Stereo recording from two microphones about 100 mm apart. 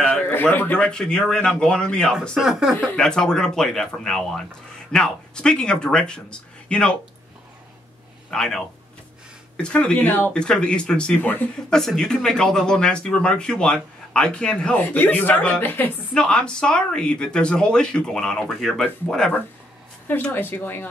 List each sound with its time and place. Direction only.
0.0 s speech: 15° left (ahead or behind)
2.4 s speech: 5° right (ahead or behind)
3.0 s speech: 5° left (ahead or behind)
8.3 s a man's voice: 5° left (ahead or behind)
11.7 s speech: 5° left (ahead or behind)